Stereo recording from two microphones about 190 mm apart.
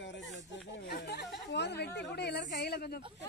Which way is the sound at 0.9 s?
65° left (ahead or behind).